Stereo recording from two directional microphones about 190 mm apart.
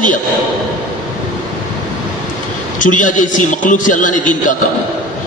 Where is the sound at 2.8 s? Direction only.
45° left (ahead or behind).